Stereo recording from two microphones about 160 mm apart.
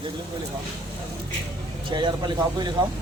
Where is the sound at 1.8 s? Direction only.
30° right (ahead or behind).